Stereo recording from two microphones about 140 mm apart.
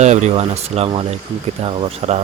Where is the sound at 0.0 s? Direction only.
55° right (ahead or behind).